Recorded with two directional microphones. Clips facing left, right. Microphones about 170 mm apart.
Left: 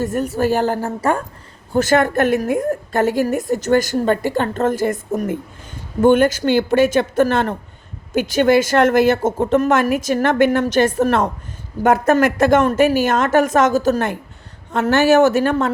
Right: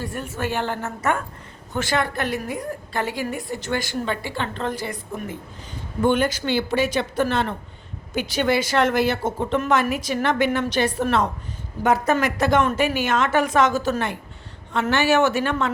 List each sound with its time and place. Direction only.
0.0 s a woman's voice: 45° left (ahead or behind)
1.7 s a woman's voice: 45° left (ahead or behind)